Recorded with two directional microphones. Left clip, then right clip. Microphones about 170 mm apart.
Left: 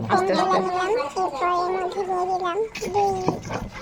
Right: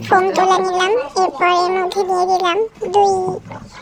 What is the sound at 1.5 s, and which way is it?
Child singing, 55° right (ahead or behind).